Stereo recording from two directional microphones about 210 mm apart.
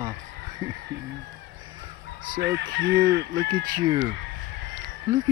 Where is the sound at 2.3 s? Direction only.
50° right (ahead or behind).